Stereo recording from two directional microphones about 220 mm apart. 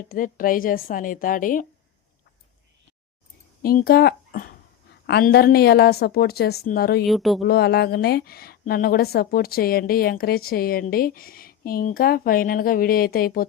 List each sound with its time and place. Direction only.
0.1 s a woman's voice: 40° left (ahead or behind)
3.6 s a woman's voice: 45° left (ahead or behind)
7.1 s speech: centre (ahead or behind)
7.4 s a woman's voice: 45° left (ahead or behind)